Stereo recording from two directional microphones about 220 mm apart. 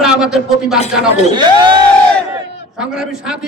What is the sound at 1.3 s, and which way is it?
Speech, 20° right (ahead or behind).